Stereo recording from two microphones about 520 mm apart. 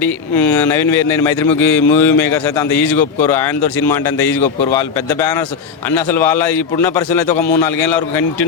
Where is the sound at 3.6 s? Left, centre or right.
Left.